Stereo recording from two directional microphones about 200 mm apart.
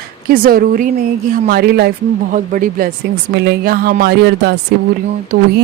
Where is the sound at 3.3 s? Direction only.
55° right (ahead or behind).